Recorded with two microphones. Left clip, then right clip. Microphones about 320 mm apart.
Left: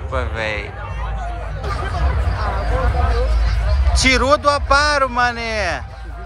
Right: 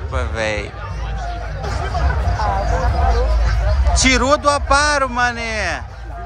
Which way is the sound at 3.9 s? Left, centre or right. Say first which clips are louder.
Even; centre.